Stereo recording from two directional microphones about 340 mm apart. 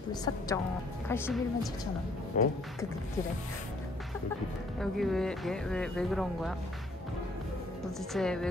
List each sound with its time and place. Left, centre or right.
0.1 s a woman's voice: centre
2.3 s music: left
4.7 s speech: centre
8.1 s speech: centre